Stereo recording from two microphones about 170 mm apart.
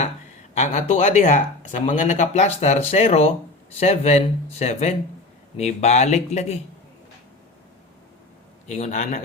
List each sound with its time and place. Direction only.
0.5 s speech: 40° left (ahead or behind)
8.6 s speech: 45° left (ahead or behind)